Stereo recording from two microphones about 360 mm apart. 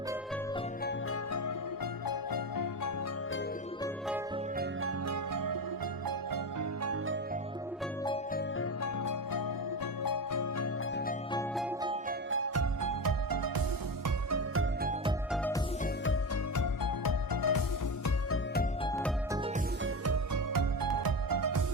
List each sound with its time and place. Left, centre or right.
2.0 s music: left
4.8 s music: right
6.8 s music: right
8.0 s music: centre
8.8 s music: left
12.3 s music: right
12.8 s music: right
14.3 s music: right
14.8 s music: right
16.6 s music: left
20.3 s music: right